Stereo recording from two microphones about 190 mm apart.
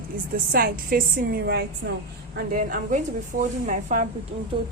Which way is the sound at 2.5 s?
45° right (ahead or behind).